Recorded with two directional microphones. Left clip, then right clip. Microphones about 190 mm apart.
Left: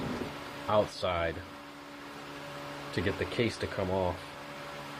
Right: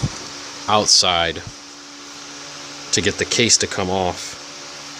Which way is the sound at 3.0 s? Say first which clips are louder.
Right 13 dB; 65° right (ahead or behind).